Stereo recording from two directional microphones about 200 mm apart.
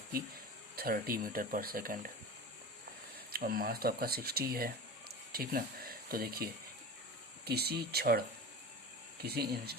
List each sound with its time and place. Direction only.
0.8 s speech: 45° right (ahead or behind)
3.3 s speech: 45° right (ahead or behind)
9.2 s speech: 50° right (ahead or behind)